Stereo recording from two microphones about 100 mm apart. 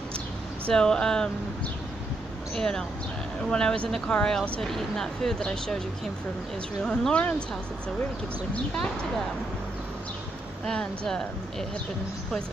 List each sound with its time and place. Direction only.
0.7 s speech: 5° left (ahead or behind)
2.5 s speech: 5° left (ahead or behind)
6.8 s speech: 5° left (ahead or behind)
10.6 s speech: 10° left (ahead or behind)